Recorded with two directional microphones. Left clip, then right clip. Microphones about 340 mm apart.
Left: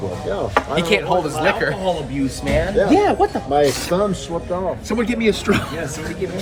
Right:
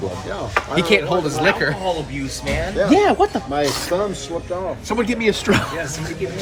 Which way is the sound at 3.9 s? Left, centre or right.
Left.